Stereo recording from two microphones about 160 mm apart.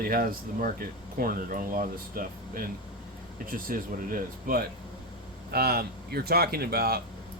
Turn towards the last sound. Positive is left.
turn(degrees=-75)  # may be behind; listen again after turning